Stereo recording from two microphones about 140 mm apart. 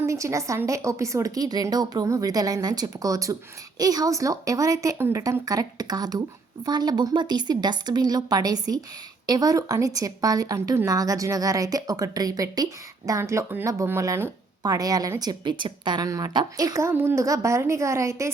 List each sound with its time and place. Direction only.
0.0 s speech: 20° right (ahead or behind)